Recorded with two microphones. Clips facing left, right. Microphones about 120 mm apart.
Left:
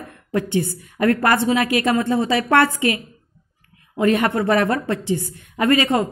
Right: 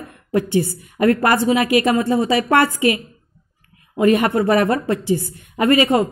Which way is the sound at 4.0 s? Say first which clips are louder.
Right 3 dB; 10° right (ahead or behind).